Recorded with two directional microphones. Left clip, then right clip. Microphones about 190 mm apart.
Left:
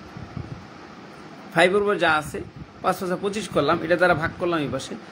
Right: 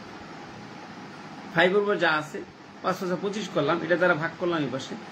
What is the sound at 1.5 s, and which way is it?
Speech, 35° left (ahead or behind).